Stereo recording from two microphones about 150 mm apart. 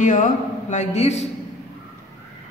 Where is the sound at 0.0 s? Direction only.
55° left (ahead or behind).